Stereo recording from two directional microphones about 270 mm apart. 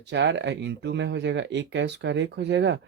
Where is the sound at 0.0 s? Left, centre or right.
Right.